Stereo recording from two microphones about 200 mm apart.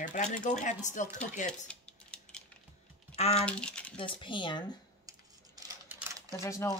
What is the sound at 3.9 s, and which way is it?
Speech, 25° left (ahead or behind).